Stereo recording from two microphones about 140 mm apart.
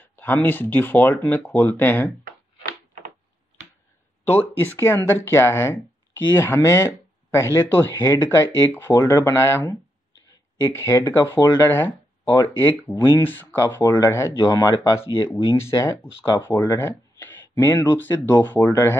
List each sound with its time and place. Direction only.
0.0 s speech: 15° left (ahead or behind)
2.6 s door: 65° right (ahead or behind)
4.3 s speech: 15° left (ahead or behind)